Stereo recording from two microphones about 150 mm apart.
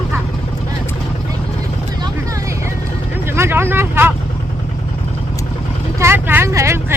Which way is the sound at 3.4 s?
15° right (ahead or behind).